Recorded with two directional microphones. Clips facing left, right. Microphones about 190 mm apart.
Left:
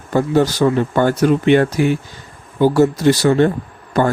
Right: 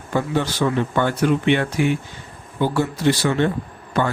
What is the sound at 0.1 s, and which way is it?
A man's voice, 40° left (ahead or behind).